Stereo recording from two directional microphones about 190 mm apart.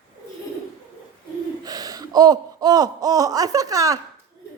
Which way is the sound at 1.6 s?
20° right (ahead or behind).